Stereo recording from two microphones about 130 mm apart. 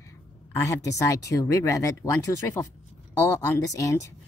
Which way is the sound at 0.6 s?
25° left (ahead or behind).